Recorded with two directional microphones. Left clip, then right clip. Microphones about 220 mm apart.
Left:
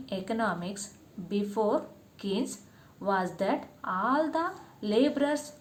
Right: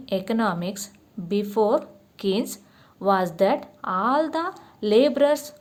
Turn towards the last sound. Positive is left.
turn(degrees=-50)  # may be behind; listen again after turning